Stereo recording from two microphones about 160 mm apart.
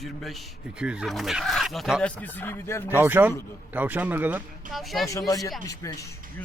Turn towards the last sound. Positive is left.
turn(degrees=20)  # may be behind; listen again after turning